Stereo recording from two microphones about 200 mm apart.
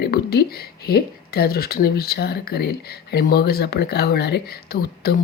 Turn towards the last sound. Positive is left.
turn(degrees=55)  # may be behind; listen again after turning